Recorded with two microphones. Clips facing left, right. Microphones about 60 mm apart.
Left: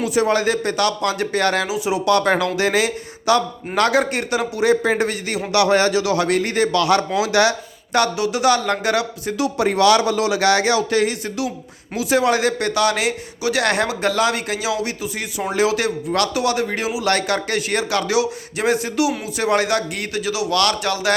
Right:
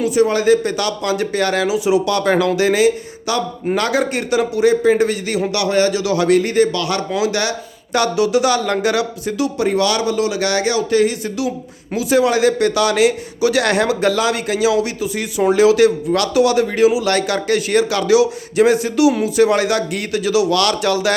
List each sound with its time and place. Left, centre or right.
0.1 s a man's voice: left
1.6 s a man's voice: left
5.5 s speech: left
6.0 s a man's voice: left
7.9 s a man's voice: left
9.4 s a man's voice: left